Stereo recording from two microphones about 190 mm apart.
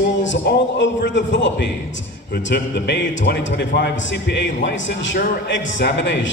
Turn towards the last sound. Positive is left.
turn(degrees=70)  # may be behind; listen again after turning